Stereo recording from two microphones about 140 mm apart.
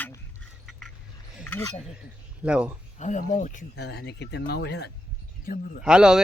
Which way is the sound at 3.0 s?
60° left (ahead or behind).